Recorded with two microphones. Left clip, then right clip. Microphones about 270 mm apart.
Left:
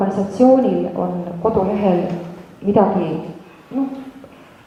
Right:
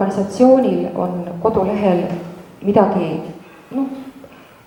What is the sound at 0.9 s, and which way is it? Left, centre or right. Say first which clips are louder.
Speech: right 1 dB; centre.